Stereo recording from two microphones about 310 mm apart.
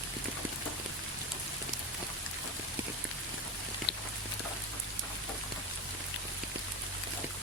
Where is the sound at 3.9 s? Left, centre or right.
Left.